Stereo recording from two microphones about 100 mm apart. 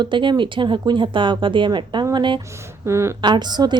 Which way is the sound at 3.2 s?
45° right (ahead or behind).